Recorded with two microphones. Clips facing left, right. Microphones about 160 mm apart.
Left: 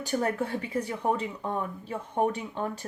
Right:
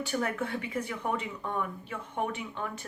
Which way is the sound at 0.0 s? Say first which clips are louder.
Left 3 dB; 35° left (ahead or behind).